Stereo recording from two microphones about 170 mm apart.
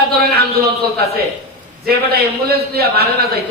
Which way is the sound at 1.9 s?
65° right (ahead or behind).